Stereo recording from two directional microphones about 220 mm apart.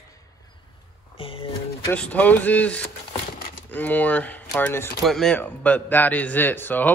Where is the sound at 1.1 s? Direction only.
25° left (ahead or behind).